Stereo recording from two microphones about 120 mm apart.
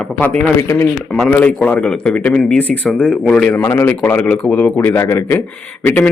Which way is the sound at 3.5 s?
20° left (ahead or behind).